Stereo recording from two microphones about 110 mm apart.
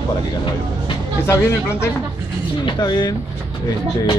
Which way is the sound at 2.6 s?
40° left (ahead or behind).